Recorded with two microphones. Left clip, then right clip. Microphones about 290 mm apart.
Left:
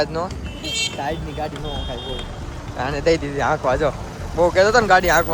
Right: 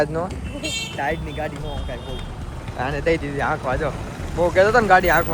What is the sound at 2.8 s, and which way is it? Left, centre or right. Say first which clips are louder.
Speech: left 2 dB; centre.